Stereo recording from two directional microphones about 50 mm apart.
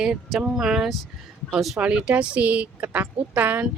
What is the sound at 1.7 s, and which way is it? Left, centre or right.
A woman's voice, right.